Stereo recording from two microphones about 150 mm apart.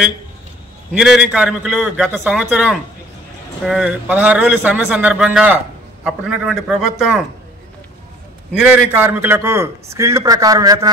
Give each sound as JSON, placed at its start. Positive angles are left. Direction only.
{"t": 0.9, "sound": "a man's voice", "side_deg": -5}
{"t": 8.5, "sound": "a man's voice", "side_deg": -10}